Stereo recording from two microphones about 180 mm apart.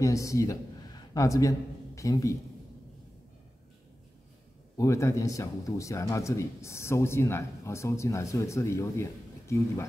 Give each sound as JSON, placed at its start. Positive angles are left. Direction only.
{"t": 0.0, "sound": "a man's voice", "side_deg": 15}
{"t": 4.7, "sound": "speech", "side_deg": 15}